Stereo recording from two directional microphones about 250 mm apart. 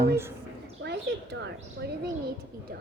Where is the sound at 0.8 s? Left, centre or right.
Right.